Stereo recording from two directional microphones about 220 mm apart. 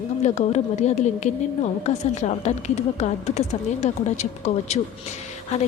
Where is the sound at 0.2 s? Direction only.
30° left (ahead or behind).